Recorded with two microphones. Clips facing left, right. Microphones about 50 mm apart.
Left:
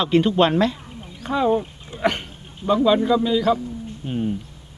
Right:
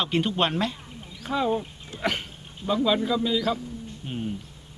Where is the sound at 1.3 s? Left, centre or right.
Centre.